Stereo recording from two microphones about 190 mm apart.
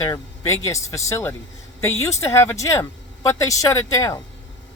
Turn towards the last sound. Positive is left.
turn(degrees=20)  # may be behind; listen again after turning